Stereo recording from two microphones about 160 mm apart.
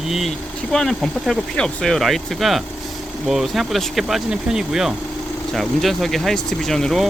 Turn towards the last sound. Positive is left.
turn(degrees=0)  # may be behind; listen again after turning